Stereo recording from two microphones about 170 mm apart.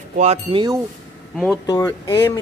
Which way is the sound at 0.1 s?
45° right (ahead or behind).